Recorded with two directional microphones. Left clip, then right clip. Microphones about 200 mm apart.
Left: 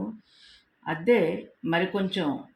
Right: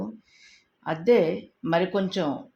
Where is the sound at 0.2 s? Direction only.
10° right (ahead or behind).